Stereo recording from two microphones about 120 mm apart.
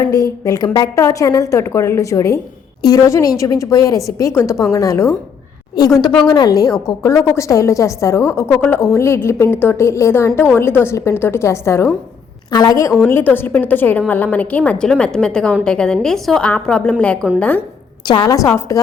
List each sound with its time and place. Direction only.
0.0 s a woman's voice: 30° left (ahead or behind); by 17.2 s 10° left (ahead or behind)
18.0 s a woman's voice: 35° left (ahead or behind)